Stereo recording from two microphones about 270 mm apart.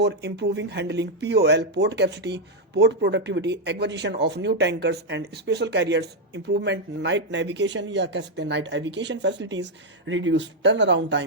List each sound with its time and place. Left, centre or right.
0.0 s speech: right